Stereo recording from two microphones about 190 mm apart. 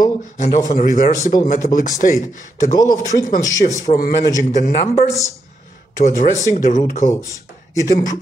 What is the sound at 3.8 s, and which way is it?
A man's voice, 45° left (ahead or behind).